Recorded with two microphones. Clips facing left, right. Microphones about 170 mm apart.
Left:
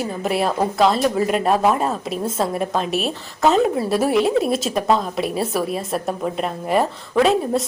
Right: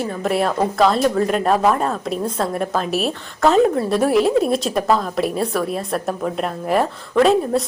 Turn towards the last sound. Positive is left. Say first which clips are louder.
# right 2 dB
turn(degrees=0)  # may be behind; listen again after turning